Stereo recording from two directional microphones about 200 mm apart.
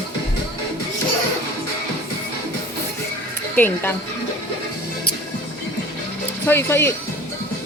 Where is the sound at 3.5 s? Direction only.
10° left (ahead or behind).